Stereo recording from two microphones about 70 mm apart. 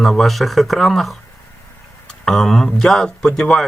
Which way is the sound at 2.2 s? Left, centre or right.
Centre.